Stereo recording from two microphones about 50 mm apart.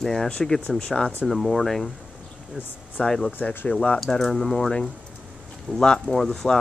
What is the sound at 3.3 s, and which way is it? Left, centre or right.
Speech, left.